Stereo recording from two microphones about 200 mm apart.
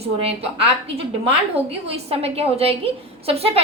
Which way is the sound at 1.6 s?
30° right (ahead or behind).